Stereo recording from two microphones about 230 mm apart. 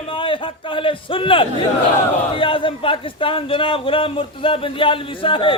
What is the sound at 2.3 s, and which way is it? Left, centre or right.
A man's voice, left.